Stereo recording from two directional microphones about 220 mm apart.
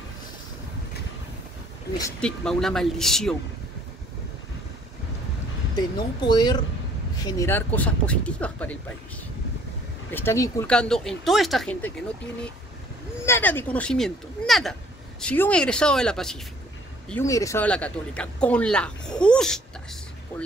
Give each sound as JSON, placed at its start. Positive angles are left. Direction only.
{"t": 2.0, "sound": "speech", "side_deg": 15}
{"t": 2.2, "sound": "speech", "side_deg": 0}
{"t": 5.8, "sound": "speech", "side_deg": 20}
{"t": 10.1, "sound": "speech", "side_deg": 10}
{"t": 13.2, "sound": "speech", "side_deg": 10}
{"t": 17.1, "sound": "speech", "side_deg": 15}